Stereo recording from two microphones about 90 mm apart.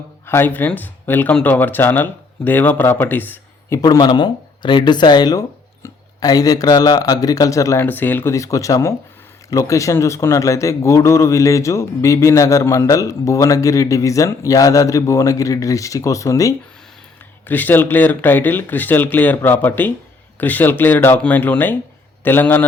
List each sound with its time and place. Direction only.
0.3 s speech: 25° left (ahead or behind)
3.8 s speech: 50° left (ahead or behind)
7.8 s speech: 20° left (ahead or behind)
8.3 s speech: 35° left (ahead or behind)
17.4 s speech: 20° left (ahead or behind)